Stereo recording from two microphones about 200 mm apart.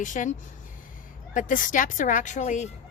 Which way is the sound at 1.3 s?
40° left (ahead or behind).